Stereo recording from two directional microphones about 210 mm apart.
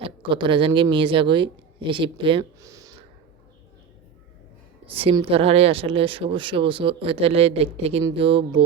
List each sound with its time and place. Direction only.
0.0 s speech: 20° right (ahead or behind)
4.9 s speech: 25° right (ahead or behind)